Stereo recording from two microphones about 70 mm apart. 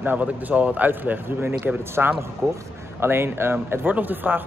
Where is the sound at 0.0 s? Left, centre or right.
Right.